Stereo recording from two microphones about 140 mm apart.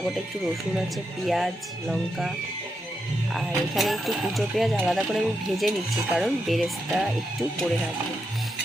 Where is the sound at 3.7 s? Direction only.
Centre (ahead or behind).